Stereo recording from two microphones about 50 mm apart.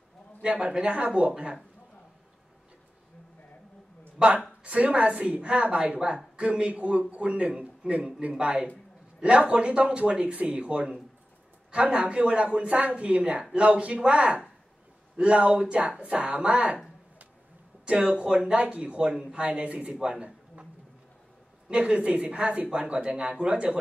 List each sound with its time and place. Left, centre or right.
0.5 s a woman's voice: right
4.2 s a woman's voice: right
17.8 s a woman's voice: centre
21.6 s a woman's voice: right